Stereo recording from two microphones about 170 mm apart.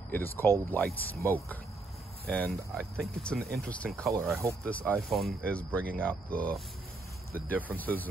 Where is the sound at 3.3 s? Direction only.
65° right (ahead or behind).